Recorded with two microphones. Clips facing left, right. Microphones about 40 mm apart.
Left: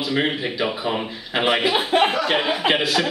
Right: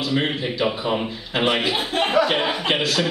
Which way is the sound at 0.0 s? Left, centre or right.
Centre.